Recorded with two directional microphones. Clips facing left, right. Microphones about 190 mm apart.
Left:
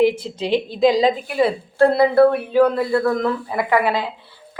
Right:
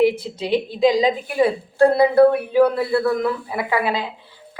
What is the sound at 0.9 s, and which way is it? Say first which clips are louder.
A woman's voice: left 1 dB; 15° right (ahead or behind).